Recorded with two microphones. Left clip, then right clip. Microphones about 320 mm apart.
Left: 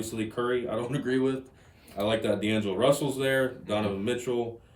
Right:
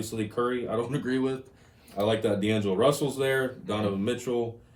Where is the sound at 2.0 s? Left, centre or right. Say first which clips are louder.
Right 1 dB; centre.